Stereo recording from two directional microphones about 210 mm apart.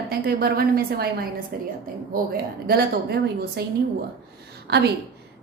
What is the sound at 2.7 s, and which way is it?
Speech, 50° right (ahead or behind).